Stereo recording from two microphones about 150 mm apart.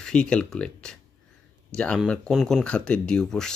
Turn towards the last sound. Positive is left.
turn(degrees=5)  # may be behind; listen again after turning